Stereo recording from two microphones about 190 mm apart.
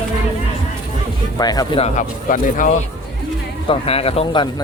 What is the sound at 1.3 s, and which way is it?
Speech, 20° left (ahead or behind).